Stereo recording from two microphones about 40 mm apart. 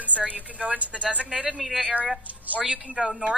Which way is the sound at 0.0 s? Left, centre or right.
Right.